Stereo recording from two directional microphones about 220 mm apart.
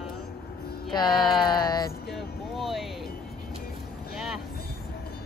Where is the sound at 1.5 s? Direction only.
20° left (ahead or behind).